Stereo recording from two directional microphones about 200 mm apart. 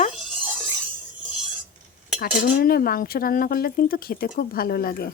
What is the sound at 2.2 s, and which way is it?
Speech, 45° left (ahead or behind).